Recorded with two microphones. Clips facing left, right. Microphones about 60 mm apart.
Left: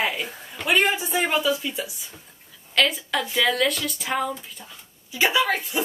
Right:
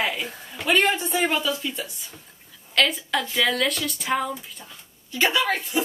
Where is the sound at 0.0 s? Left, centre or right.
Centre.